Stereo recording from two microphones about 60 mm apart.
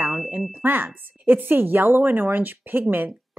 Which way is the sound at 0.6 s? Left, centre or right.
Right.